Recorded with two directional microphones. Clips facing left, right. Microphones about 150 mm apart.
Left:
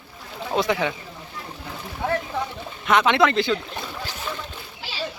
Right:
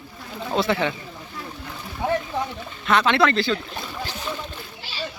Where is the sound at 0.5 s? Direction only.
15° left (ahead or behind).